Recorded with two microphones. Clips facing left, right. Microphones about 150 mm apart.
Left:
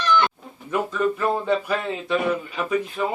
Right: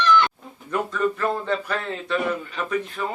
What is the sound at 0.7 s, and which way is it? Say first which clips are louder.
Speech: left 1 dB; 5° left (ahead or behind).